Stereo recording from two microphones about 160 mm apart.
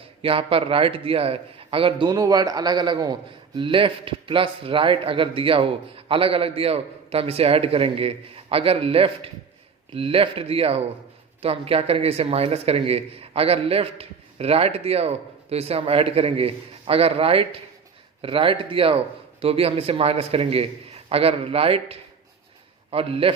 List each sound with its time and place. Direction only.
0.2 s a man's voice: 35° right (ahead or behind)